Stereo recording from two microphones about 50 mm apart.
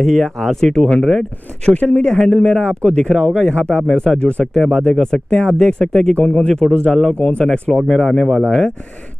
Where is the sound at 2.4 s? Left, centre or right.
Centre.